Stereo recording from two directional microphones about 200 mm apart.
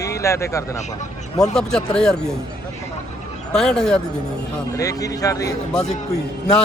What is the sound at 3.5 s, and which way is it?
Speech, 5° left (ahead or behind).